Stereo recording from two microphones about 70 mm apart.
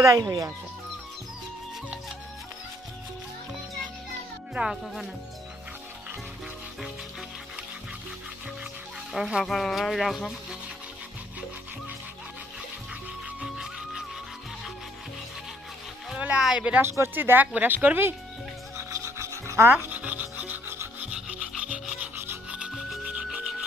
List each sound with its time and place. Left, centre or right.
0.0 s speech: right
4.6 s a woman's voice: right
9.1 s speech: centre
13.4 s music: centre
16.3 s speech: centre
16.8 s a woman's voice: right
18.8 s filing: right
19.9 s rub: right
21.0 s rub: centre
22.1 s rub: right